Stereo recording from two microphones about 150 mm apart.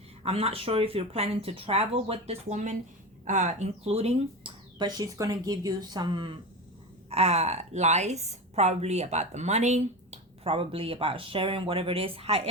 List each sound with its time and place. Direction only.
0.2 s a woman's voice: 40° right (ahead or behind)
4.8 s speech: 25° right (ahead or behind)
7.1 s a woman's voice: 45° right (ahead or behind)